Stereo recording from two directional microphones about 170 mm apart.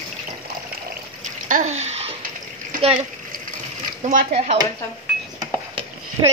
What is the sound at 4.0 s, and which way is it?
Speech, 45° right (ahead or behind).